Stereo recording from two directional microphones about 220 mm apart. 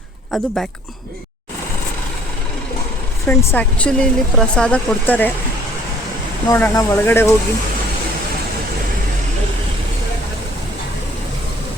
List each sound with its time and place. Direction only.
0.3 s speech: centre (ahead or behind)
3.2 s speech: 5° left (ahead or behind)
6.5 s speech: 10° left (ahead or behind)